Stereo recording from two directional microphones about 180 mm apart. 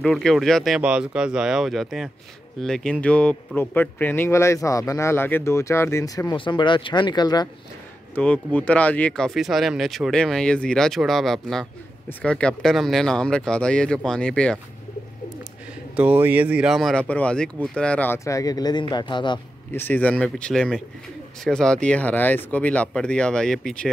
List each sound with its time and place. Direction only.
0.0 s speech: 5° left (ahead or behind); by 7.4 s 25° left (ahead or behind)
8.1 s speech: 5° left (ahead or behind)
16.0 s speech: 10° right (ahead or behind); by 19.4 s 25° left (ahead or behind)
19.7 s speech: 10° left (ahead or behind)